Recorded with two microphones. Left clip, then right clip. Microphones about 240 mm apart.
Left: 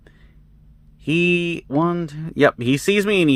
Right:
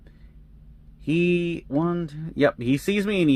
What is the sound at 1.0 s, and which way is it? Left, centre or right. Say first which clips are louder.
Speech: left 4 dB; left.